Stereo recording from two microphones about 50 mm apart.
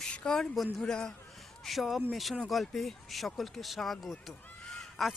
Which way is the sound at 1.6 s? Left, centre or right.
Centre.